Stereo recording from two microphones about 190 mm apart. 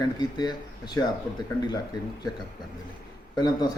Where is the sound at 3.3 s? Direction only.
20° left (ahead or behind).